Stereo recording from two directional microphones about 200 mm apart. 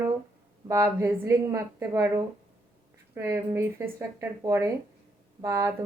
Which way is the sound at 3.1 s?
15° right (ahead or behind).